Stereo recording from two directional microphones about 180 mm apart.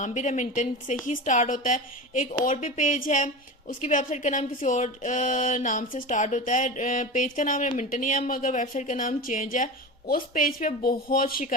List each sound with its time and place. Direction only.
0.0 s speech: 40° left (ahead or behind)